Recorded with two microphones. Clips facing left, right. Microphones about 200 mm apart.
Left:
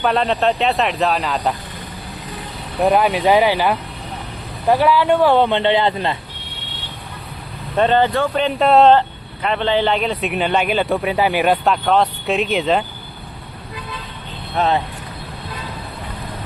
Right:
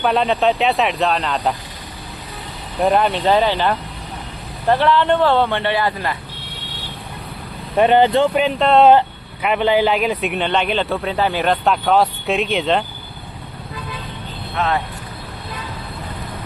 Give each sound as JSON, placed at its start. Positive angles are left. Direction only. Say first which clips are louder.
{"t": 0.0, "sound": "speech", "louder": "right 1 dB", "side_deg": 0}
{"t": 2.8, "sound": "speech", "louder": "left 1 dB", "side_deg": 5}
{"t": 7.8, "sound": "speech", "louder": "right 3 dB", "side_deg": -15}
{"t": 8.5, "sound": "speech", "louder": "left 2 dB", "side_deg": 5}
{"t": 8.9, "sound": "speech", "louder": "right 1 dB", "side_deg": -10}
{"t": 14.5, "sound": "speech", "louder": "left 3 dB", "side_deg": 35}